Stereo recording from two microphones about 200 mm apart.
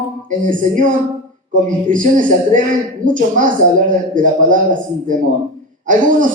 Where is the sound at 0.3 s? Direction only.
40° right (ahead or behind).